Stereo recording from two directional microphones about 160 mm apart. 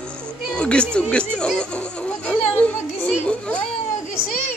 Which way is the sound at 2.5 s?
10° left (ahead or behind).